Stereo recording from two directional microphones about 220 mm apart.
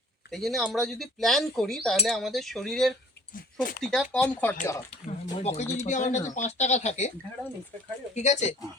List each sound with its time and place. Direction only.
0.3 s speech: centre (ahead or behind)
3.3 s speech: 40° left (ahead or behind)
3.8 s speech: centre (ahead or behind)
5.0 s speech: 30° left (ahead or behind)
8.1 s speech: 30° left (ahead or behind)